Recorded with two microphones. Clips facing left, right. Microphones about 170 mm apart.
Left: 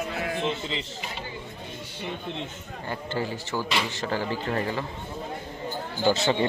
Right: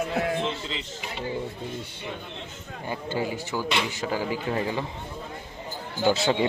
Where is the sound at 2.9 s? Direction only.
15° right (ahead or behind).